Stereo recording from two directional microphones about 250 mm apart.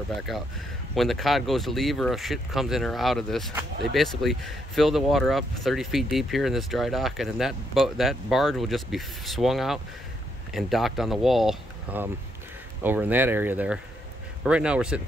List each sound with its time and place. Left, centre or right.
0.3 s speech: centre